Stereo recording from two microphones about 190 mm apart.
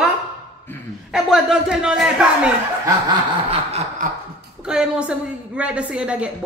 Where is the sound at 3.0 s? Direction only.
25° right (ahead or behind).